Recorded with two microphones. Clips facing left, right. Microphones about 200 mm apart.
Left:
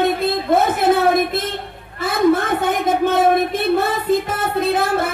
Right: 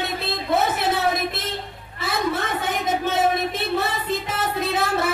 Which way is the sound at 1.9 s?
55° left (ahead or behind).